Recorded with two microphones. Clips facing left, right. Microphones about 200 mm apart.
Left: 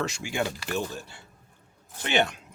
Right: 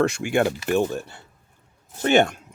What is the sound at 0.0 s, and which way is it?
Speech, 55° right (ahead or behind).